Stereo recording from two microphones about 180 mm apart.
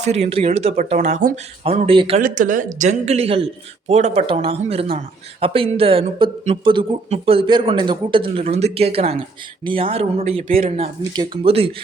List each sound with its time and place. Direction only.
0.0 s speech: 35° right (ahead or behind)
2.2 s speech: 45° right (ahead or behind); by 11.7 s 30° right (ahead or behind)